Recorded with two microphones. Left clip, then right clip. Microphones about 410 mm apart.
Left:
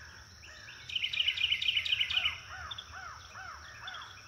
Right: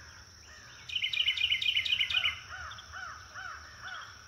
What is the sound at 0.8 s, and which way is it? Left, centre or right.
Insect, right.